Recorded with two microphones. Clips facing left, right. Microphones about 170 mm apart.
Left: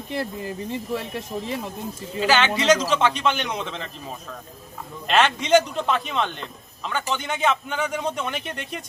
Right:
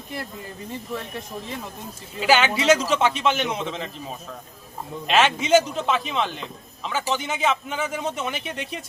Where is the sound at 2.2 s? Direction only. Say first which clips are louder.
Right 1 dB; 10° right (ahead or behind).